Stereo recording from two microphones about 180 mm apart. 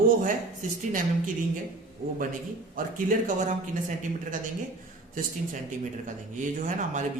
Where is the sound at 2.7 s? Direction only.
50° right (ahead or behind).